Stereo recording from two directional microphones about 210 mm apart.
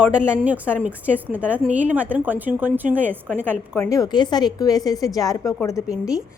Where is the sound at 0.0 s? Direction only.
5° right (ahead or behind).